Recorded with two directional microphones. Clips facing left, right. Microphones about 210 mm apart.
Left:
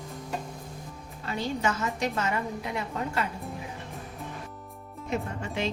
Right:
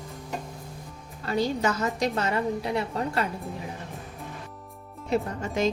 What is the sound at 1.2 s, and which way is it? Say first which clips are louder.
A woman's voice: right 4 dB; 40° right (ahead or behind).